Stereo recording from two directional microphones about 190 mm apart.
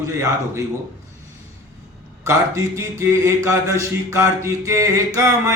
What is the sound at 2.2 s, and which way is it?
Speech, 15° right (ahead or behind).